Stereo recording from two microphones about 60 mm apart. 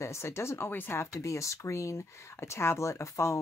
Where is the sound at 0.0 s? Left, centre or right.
Left.